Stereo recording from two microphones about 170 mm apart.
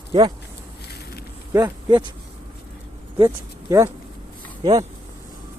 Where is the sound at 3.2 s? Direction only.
15° right (ahead or behind).